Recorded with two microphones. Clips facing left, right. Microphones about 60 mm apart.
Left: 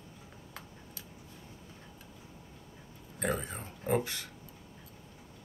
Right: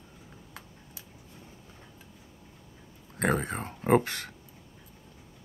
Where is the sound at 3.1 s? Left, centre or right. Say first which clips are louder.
Right 6 dB; right.